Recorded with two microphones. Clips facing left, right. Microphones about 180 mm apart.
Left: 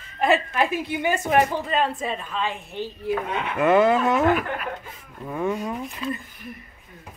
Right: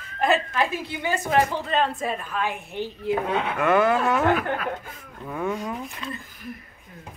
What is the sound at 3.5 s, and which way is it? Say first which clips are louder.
Speech: left 3 dB; 5° left (ahead or behind).